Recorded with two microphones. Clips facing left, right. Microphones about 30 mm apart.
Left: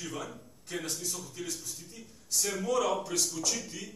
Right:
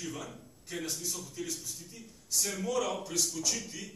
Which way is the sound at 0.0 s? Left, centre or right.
Centre.